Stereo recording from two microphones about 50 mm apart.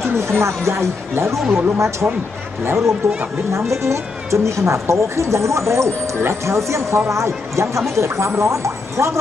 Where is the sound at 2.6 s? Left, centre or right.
Right.